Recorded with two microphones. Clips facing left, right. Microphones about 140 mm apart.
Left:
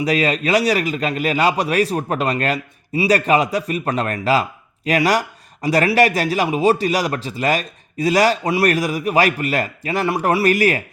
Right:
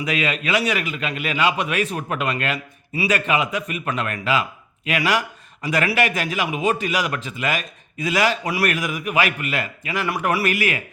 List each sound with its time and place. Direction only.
0.0 s a man's voice: 35° left (ahead or behind)